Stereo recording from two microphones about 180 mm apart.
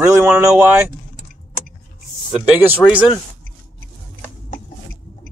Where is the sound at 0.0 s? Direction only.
15° right (ahead or behind).